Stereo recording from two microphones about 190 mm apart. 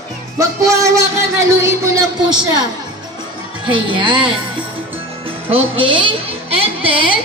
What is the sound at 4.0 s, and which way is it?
Speech, 25° right (ahead or behind).